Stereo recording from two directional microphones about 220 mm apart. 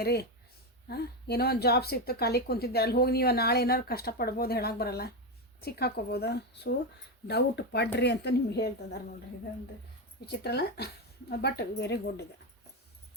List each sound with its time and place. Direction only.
0.0 s a woman's voice: 45° left (ahead or behind)
10.2 s a woman's voice: 45° left (ahead or behind)